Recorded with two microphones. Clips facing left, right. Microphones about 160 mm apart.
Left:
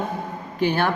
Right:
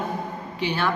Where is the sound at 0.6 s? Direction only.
55° left (ahead or behind).